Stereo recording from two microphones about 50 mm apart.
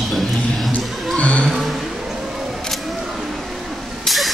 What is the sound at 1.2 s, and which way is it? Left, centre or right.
Speech, left.